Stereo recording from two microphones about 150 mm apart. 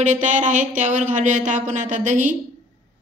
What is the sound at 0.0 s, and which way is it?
Speech, 55° right (ahead or behind).